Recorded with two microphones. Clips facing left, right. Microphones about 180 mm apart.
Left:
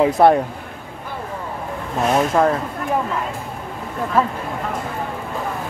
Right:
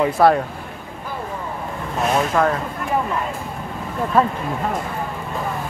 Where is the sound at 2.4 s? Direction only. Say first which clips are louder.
Left 2 dB; 25° left (ahead or behind).